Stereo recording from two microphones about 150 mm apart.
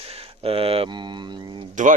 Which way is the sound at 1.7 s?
55° right (ahead or behind).